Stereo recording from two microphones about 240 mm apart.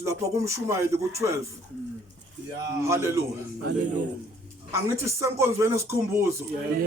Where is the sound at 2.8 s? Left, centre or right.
Centre.